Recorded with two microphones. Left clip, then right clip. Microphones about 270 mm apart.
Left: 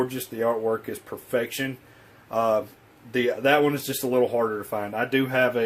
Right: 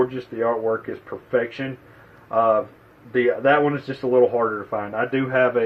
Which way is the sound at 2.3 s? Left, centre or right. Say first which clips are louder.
Right 5 dB; left.